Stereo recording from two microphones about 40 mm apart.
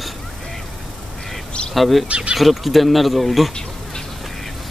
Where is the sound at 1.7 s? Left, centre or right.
Centre.